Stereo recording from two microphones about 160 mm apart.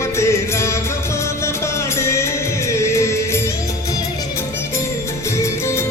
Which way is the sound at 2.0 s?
15° left (ahead or behind).